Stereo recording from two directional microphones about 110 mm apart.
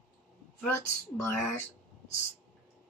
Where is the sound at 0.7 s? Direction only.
25° left (ahead or behind).